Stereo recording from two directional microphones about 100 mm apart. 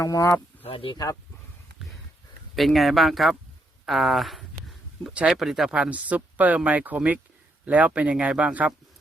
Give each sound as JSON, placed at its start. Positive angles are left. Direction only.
{"t": 0.0, "sound": "speech", "side_deg": 30}
{"t": 0.6, "sound": "speech", "side_deg": 65}
{"t": 2.6, "sound": "speech", "side_deg": 0}